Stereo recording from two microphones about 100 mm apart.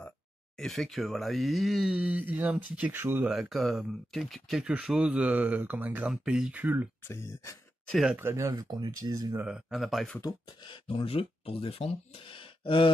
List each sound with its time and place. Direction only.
0.6 s speech: 5° left (ahead or behind)
2.0 s speech: 15° right (ahead or behind)
3.3 s speech: centre (ahead or behind); by 6.9 s 15° right (ahead or behind)
7.1 s speech: 25° left (ahead or behind)
7.9 s speech: 5° right (ahead or behind)
8.2 s speech: 25° right (ahead or behind)
8.5 s speech: 40° right (ahead or behind)
9.5 s speech: 5° right (ahead or behind)
10.2 s speech: 50° left (ahead or behind)
10.9 s speech: 70° left (ahead or behind)